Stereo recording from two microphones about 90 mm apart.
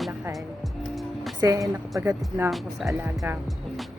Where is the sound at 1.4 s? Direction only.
40° right (ahead or behind).